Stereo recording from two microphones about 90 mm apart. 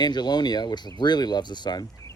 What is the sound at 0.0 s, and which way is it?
Speech, 50° left (ahead or behind).